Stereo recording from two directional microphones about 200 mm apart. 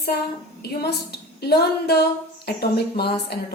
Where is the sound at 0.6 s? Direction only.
55° left (ahead or behind).